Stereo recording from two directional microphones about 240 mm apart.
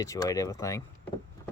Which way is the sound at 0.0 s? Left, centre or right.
Centre.